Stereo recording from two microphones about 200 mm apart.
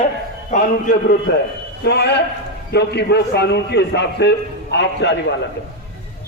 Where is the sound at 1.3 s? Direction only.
55° left (ahead or behind).